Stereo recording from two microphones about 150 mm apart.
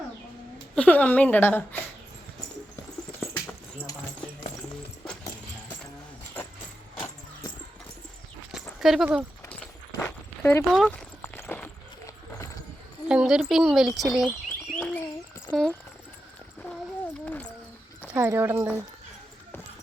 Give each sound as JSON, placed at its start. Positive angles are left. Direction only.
{"t": 0.8, "sound": "speech", "side_deg": 10}
{"t": 3.3, "sound": "dog", "side_deg": 15}
{"t": 8.8, "sound": "speech", "side_deg": 0}
{"t": 9.5, "sound": "walk", "side_deg": 10}
{"t": 10.7, "sound": "speech", "side_deg": 5}
{"t": 11.2, "sound": "clip-clop", "side_deg": 15}
{"t": 13.1, "sound": "speech", "side_deg": -5}
{"t": 14.8, "sound": "bird", "side_deg": 10}
{"t": 15.4, "sound": "speech", "side_deg": 5}
{"t": 17.2, "sound": "a sound", "side_deg": 10}
{"t": 18.1, "sound": "speech", "side_deg": -15}